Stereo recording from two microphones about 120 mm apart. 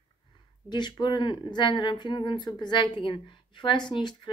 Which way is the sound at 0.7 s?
35° left (ahead or behind).